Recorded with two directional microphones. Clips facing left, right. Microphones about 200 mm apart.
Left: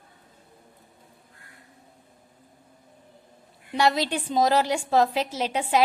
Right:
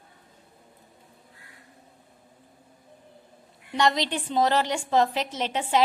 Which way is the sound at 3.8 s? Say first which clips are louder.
Left 1 dB; 5° left (ahead or behind).